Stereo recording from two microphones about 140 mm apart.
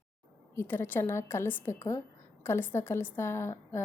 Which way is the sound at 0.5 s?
15° left (ahead or behind).